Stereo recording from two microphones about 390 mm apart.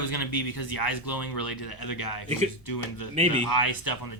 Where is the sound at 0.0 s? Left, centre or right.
Left.